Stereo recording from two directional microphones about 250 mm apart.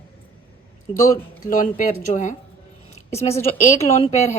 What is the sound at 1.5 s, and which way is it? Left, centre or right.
Speech, left.